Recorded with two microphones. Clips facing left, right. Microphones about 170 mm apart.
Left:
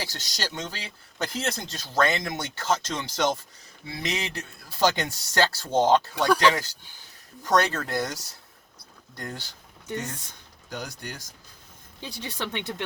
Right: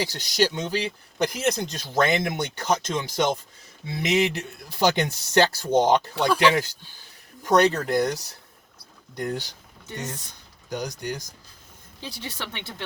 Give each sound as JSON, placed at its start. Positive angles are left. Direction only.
{"t": 0.0, "sound": "speech", "side_deg": -15}
{"t": 10.7, "sound": "speech", "side_deg": -15}
{"t": 11.9, "sound": "speech", "side_deg": 20}